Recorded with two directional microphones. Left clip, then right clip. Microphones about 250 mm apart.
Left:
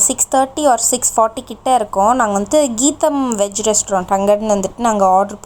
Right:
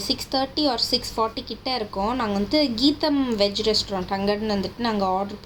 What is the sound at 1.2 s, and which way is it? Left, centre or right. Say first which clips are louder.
A woman's voice: left 10 dB; left.